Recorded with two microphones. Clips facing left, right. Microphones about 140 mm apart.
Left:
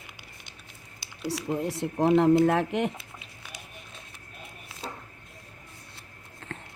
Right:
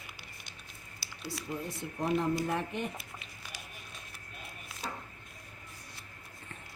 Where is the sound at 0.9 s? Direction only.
20° left (ahead or behind).